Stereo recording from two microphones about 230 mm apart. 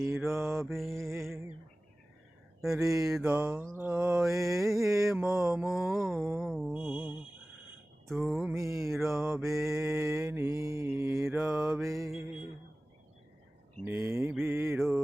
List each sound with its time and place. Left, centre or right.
0.2 s mantra: centre
2.6 s mantra: centre
8.5 s mantra: centre
8.9 s mantra: centre
12.0 s music: centre
13.8 s mantra: centre